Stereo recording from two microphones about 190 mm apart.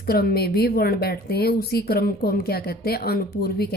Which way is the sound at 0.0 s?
55° left (ahead or behind).